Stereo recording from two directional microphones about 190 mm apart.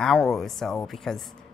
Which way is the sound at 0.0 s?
Centre (ahead or behind).